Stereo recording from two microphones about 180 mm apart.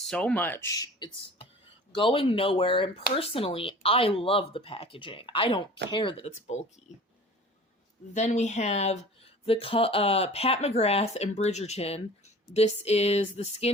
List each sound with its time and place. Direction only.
0.0 s speech: 5° left (ahead or behind); by 6.6 s 35° left (ahead or behind)
8.1 s speech: 40° left (ahead or behind)